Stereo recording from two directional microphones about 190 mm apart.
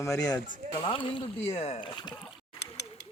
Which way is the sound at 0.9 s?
25° left (ahead or behind).